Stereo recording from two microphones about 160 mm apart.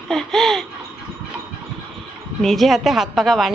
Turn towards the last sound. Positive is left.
turn(degrees=0)  # may be behind; listen again after turning